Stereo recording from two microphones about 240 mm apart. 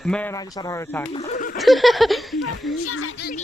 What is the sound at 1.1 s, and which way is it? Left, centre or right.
Speech, left.